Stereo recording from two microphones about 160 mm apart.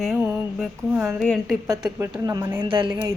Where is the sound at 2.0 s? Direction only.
20° right (ahead or behind).